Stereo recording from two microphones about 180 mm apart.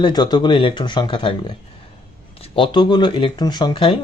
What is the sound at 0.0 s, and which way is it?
Speech, 25° left (ahead or behind).